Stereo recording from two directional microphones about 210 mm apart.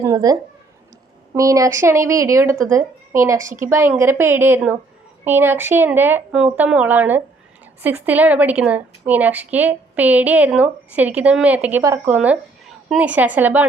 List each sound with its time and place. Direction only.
0.0 s a woman's voice: 15° right (ahead or behind)